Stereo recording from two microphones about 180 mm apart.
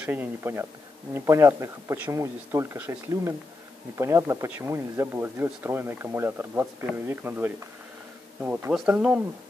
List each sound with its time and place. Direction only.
0.0 s speech: 10° right (ahead or behind)